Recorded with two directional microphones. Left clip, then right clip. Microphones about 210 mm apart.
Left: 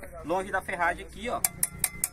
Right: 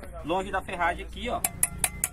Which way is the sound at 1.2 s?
10° left (ahead or behind).